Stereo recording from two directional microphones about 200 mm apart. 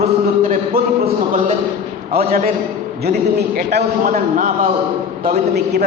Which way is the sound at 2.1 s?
45° right (ahead or behind).